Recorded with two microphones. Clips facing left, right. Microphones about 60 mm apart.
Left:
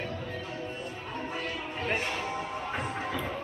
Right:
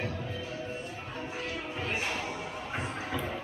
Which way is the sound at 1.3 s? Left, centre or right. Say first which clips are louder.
Even; left.